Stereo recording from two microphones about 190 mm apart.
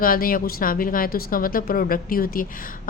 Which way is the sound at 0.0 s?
50° left (ahead or behind).